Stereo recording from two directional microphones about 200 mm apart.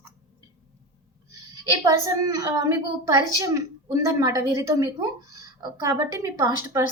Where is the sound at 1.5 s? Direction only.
20° right (ahead or behind).